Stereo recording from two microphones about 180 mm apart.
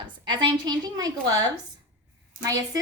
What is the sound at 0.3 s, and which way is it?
A woman's voice, 25° right (ahead or behind).